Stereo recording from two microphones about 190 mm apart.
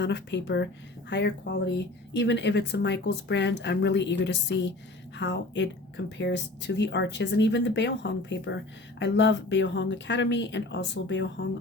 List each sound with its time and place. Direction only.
0.0 s speech: 65° left (ahead or behind)